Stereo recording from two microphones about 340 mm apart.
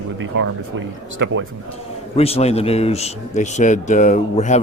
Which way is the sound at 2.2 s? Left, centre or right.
Centre.